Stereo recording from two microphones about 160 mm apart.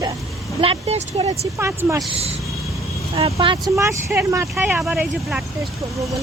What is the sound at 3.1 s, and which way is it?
Speech, 35° right (ahead or behind).